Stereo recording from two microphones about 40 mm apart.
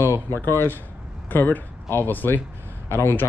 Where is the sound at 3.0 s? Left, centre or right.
Left.